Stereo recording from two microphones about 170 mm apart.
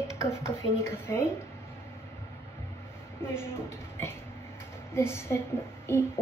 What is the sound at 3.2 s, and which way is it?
Speech, 15° left (ahead or behind).